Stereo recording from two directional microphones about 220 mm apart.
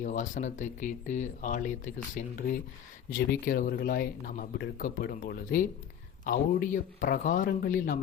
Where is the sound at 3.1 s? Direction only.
40° left (ahead or behind).